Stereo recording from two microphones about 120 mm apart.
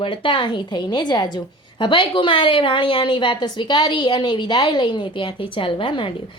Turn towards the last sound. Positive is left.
turn(degrees=45)  # may be behind; listen again after turning